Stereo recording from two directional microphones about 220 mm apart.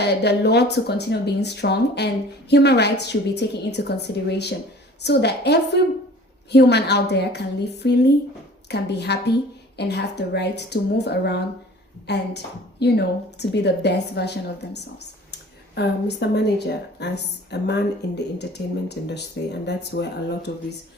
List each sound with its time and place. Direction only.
0.0 s a woman's voice: 50° left (ahead or behind)